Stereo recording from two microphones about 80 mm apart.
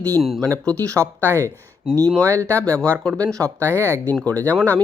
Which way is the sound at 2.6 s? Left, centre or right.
Centre.